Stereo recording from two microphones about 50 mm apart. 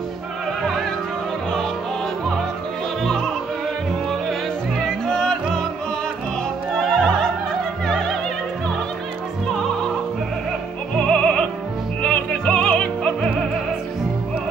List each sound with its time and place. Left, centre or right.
4.8 s music: centre
6.7 s music: centre
11.0 s music: left